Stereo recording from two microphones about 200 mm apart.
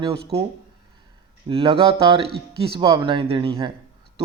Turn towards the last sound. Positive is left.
turn(degrees=-25)  # may be behind; listen again after turning